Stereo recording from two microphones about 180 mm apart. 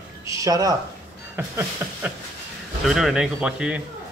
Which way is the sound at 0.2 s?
20° right (ahead or behind).